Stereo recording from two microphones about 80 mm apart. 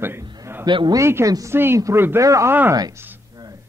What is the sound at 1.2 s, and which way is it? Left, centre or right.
Speech, right.